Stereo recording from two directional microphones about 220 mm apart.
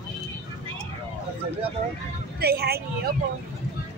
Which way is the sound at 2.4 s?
45° right (ahead or behind).